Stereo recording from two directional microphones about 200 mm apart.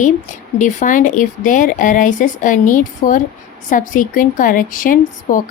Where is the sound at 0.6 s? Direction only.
40° left (ahead or behind).